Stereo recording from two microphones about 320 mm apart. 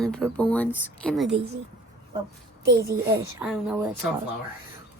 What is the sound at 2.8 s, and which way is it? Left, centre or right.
Speech, centre.